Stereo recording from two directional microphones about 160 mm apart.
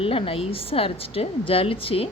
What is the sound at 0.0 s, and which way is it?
A woman's voice, 35° left (ahead or behind).